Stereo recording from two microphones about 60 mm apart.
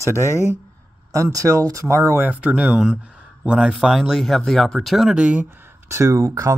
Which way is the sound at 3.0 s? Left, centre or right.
Right.